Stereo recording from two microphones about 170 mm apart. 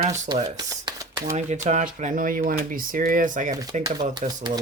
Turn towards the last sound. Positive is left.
turn(degrees=-25)  # may be behind; listen again after turning